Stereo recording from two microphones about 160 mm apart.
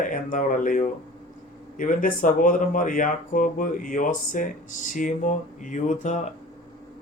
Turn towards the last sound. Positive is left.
turn(degrees=45)  # may be behind; listen again after turning